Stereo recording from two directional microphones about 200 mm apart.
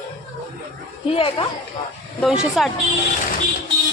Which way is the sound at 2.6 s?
Centre (ahead or behind).